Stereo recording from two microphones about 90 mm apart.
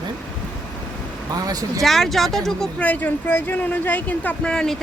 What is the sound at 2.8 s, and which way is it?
Speech, 15° left (ahead or behind).